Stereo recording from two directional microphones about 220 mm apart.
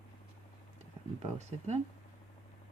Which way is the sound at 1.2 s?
30° right (ahead or behind).